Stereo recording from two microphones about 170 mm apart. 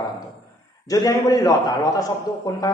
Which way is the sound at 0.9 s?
20° left (ahead or behind).